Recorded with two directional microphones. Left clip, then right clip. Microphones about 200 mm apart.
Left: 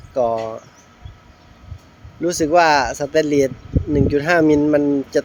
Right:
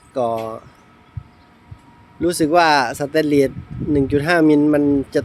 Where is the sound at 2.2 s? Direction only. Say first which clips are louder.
Even; 15° right (ahead or behind).